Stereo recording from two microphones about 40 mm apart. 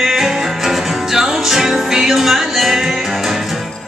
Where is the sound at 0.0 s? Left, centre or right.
Centre.